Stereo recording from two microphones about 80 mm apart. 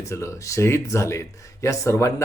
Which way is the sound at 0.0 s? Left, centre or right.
Left.